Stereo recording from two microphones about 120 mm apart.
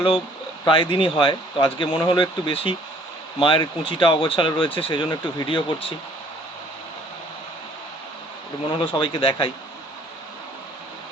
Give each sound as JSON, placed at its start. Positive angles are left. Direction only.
{"t": 0.6, "sound": "speech", "side_deg": 45}
{"t": 8.7, "sound": "speech", "side_deg": 45}